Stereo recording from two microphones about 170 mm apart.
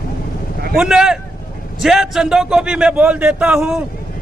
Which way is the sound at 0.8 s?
5° right (ahead or behind).